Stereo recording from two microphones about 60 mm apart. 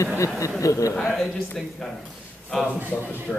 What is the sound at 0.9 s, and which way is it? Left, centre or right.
A man's voice, centre.